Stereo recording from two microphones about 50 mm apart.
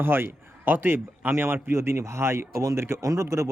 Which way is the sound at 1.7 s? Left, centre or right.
Right.